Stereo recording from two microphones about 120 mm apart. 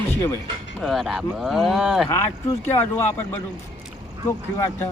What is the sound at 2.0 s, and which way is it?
Speech, 25° left (ahead or behind).